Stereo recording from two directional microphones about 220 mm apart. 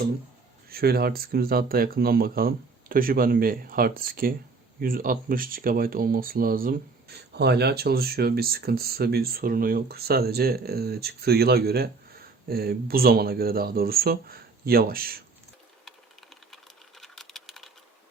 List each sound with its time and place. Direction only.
0.7 s speech: 45° right (ahead or behind)
15.8 s typing: centre (ahead or behind)
17.0 s a sound: centre (ahead or behind)